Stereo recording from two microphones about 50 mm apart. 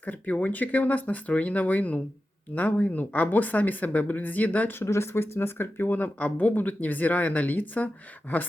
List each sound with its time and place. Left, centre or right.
0.0 s speech: left
4.9 s speech: left